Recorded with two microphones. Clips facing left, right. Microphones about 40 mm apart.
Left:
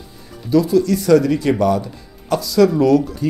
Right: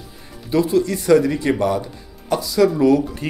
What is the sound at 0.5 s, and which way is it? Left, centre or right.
Speech, right.